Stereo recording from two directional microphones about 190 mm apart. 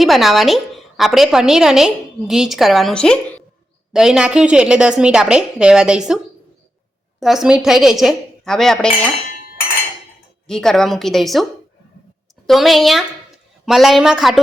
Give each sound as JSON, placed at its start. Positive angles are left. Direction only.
{"t": 0.0, "sound": "a woman's voice", "side_deg": 0}
{"t": 7.2, "sound": "a woman's voice", "side_deg": 0}
{"t": 10.4, "sound": "a woman's voice", "side_deg": 0}
{"t": 12.5, "sound": "a woman's voice", "side_deg": 0}